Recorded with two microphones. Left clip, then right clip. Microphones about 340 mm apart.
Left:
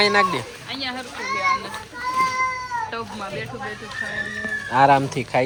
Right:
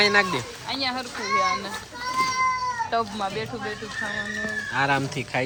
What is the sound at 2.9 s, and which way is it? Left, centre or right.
Speech, right.